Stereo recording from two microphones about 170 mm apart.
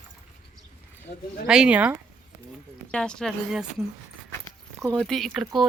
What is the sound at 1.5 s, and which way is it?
Speech, 5° right (ahead or behind).